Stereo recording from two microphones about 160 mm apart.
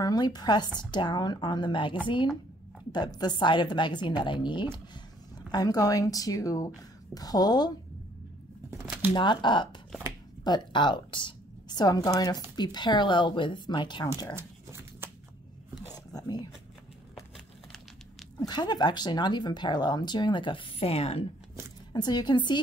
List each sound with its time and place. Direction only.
0.0 s a woman's voice: 25° left (ahead or behind)
9.1 s a woman's voice: 30° left (ahead or behind)
14.3 s a sound: 15° right (ahead or behind)
15.9 s a sound: 25° left (ahead or behind)
18.5 s a woman's voice: 25° left (ahead or behind)
21.9 s a woman's voice: 25° left (ahead or behind)